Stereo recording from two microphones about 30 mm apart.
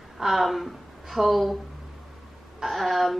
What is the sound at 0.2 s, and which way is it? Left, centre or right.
Speech, centre.